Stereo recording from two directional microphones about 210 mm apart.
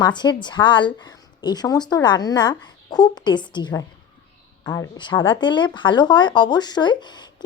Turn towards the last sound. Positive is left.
turn(degrees=20)  # may be behind; listen again after turning